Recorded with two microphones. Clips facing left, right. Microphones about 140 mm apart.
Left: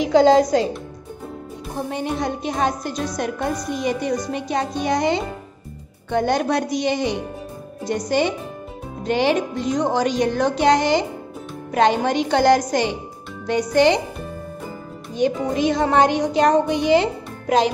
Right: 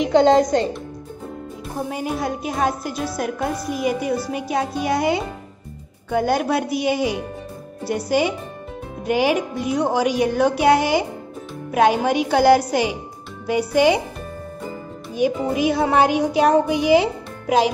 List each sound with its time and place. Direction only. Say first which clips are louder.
0.0 s a woman's voice: left 1 dB; centre (ahead or behind)
1.8 s a woman's voice: even; 5° right (ahead or behind)
15.1 s a woman's voice: even; 10° right (ahead or behind)